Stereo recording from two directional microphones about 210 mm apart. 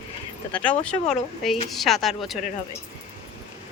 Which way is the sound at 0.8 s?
5° left (ahead or behind).